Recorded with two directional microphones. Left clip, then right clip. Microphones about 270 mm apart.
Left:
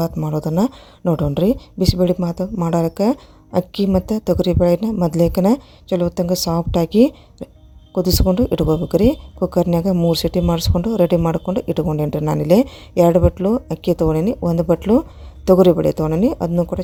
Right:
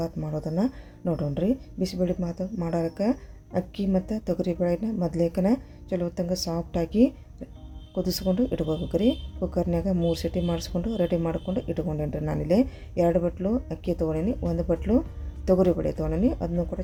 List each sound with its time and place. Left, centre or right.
0.0 s speech: left